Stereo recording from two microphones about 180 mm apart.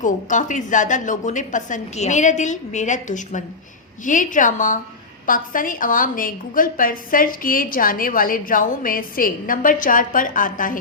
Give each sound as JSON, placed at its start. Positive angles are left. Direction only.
{"t": 0.0, "sound": "a woman's voice", "side_deg": 45}